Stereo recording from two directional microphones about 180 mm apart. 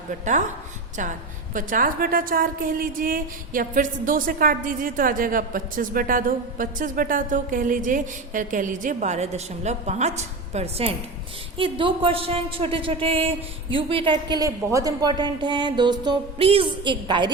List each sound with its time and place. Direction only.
0.1 s a woman's voice: 45° right (ahead or behind)
1.5 s a woman's voice: 50° right (ahead or behind); by 17.3 s 25° right (ahead or behind)